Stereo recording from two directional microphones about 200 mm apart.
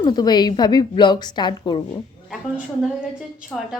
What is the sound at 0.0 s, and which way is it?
A woman's voice, 20° left (ahead or behind).